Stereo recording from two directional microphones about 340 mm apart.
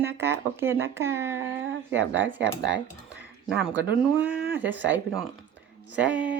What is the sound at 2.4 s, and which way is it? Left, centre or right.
Speech, right.